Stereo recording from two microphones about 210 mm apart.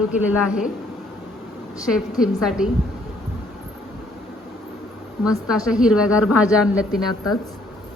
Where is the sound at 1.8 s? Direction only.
5° right (ahead or behind).